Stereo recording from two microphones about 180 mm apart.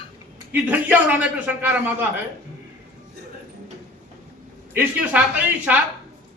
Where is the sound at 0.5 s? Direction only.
10° right (ahead or behind).